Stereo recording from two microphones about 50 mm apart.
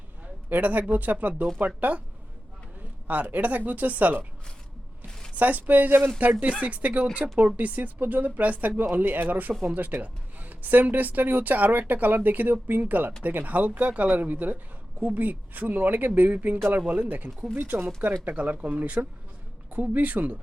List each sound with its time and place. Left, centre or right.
0.5 s speech: right
3.1 s speech: right
5.4 s speech: right
8.8 s speech: right